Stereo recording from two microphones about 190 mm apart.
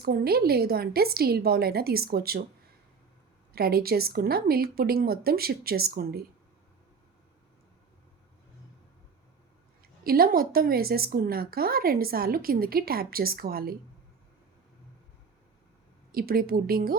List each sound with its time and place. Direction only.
0.0 s a woman's voice: 55° right (ahead or behind)
3.5 s a woman's voice: 55° right (ahead or behind)
10.0 s a woman's voice: 50° right (ahead or behind)
16.1 s a woman's voice: 50° right (ahead or behind)